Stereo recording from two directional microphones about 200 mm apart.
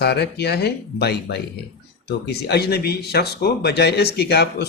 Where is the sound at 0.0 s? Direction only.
55° left (ahead or behind).